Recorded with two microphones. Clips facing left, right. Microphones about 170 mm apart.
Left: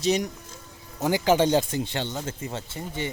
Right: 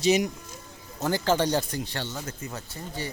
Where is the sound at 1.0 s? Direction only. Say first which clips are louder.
Left 3 dB; 15° left (ahead or behind).